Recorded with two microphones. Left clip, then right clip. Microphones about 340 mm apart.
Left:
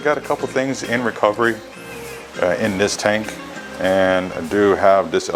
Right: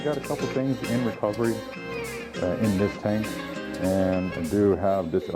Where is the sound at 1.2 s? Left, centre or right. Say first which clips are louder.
Left 12 dB; centre.